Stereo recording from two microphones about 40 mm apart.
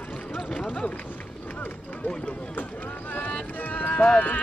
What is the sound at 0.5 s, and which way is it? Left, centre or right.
Speech, left.